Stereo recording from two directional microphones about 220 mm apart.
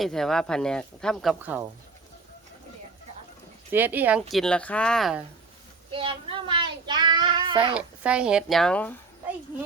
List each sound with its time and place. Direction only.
0.0 s speech: centre (ahead or behind)
3.7 s speech: 10° right (ahead or behind)
5.9 s child singing: 25° right (ahead or behind)
7.7 s speech: 5° right (ahead or behind)